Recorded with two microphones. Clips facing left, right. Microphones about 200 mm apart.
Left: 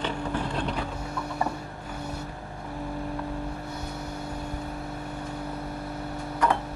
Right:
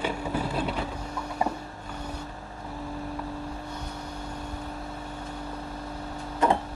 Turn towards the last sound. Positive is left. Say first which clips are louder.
# right 2 dB
turn(degrees=-25)  # may be behind; listen again after turning